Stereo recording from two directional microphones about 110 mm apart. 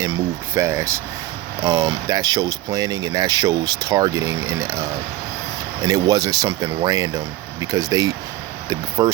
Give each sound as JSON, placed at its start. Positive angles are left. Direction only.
{"t": 0.0, "sound": "speech", "side_deg": -25}